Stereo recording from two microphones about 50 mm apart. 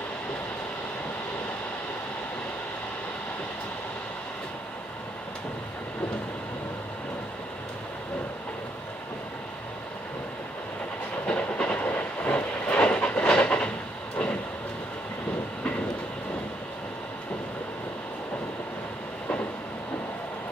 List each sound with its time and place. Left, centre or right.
11.2 s train: left